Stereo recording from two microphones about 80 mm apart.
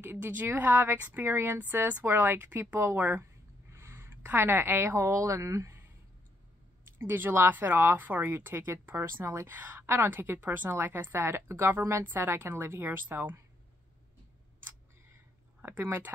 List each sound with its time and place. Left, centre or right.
0.0 s a woman's voice: right
7.0 s speech: right
15.6 s speech: right